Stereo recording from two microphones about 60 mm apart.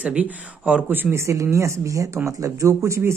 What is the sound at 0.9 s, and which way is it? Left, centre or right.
Speech, right.